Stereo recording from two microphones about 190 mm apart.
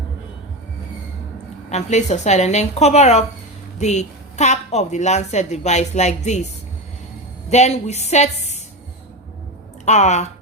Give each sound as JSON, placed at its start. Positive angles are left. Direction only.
{"t": 1.7, "sound": "a woman's voice", "side_deg": 35}
{"t": 7.5, "sound": "a woman's voice", "side_deg": 35}
{"t": 9.8, "sound": "speech", "side_deg": 35}